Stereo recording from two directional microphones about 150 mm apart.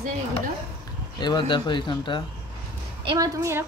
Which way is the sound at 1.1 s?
30° left (ahead or behind).